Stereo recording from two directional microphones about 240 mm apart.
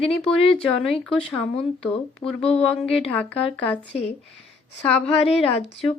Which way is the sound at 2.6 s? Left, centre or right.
Centre.